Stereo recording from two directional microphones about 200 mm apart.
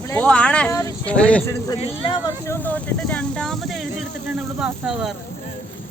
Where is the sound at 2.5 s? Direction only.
10° left (ahead or behind).